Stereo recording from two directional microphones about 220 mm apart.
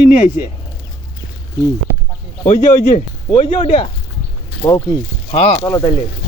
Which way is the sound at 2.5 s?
35° left (ahead or behind).